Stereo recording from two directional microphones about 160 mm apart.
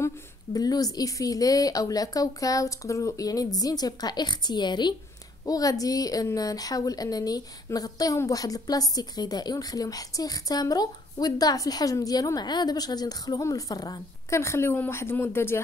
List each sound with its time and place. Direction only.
0.0 s a woman's voice: 25° left (ahead or behind)